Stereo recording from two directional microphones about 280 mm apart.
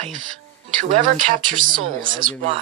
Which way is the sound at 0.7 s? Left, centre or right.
Right.